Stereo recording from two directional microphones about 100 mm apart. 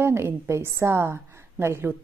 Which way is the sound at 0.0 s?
25° right (ahead or behind).